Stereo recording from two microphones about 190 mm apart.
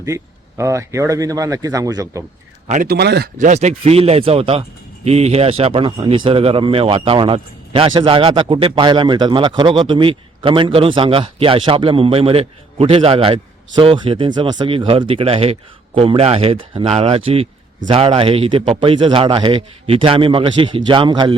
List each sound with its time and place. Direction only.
0.0 s speech: 15° right (ahead or behind)
2.6 s speech: 40° right (ahead or behind)
2.9 s speech: 60° right (ahead or behind)
3.3 s speech: 40° right (ahead or behind)